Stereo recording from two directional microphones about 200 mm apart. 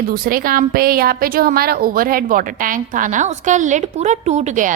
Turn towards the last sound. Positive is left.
turn(degrees=-40)  # may be behind; listen again after turning